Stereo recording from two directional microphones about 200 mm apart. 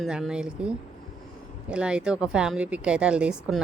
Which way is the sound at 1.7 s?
5° right (ahead or behind).